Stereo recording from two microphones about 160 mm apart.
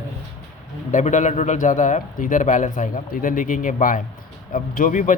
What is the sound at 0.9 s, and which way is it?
A man's voice, 50° left (ahead or behind).